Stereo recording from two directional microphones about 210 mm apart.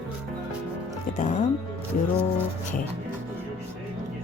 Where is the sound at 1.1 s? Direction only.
35° left (ahead or behind).